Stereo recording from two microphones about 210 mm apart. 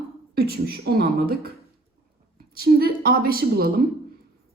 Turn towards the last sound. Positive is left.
turn(degrees=-45)  # may be behind; listen again after turning